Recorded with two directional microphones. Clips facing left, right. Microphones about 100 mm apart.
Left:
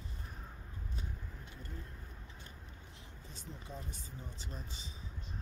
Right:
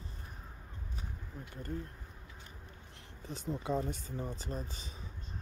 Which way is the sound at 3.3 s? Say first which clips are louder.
Right 14 dB; 70° right (ahead or behind).